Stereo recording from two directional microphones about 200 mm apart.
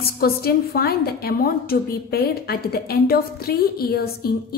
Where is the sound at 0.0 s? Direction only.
50° left (ahead or behind).